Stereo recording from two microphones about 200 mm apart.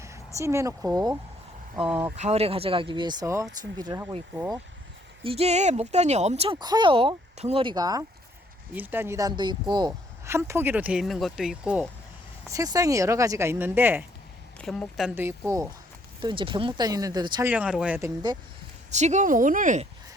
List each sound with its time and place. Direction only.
0.0 s speech: 15° right (ahead or behind)
2.1 s speech: 35° right (ahead or behind); by 4.6 s 20° right (ahead or behind)
5.2 s speech: 30° right (ahead or behind); by 11.9 s 5° right (ahead or behind)
12.5 s speech: 15° right (ahead or behind)
14.6 s speech: centre (ahead or behind)
15.1 s speech: 10° right (ahead or behind)
16.2 s speech: 25° right (ahead or behind)
17.4 s speech: 5° right (ahead or behind)
18.9 s speech: 35° right (ahead or behind)